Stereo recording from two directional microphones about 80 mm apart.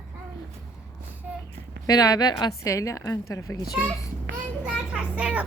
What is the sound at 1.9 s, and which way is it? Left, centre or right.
Speech, left.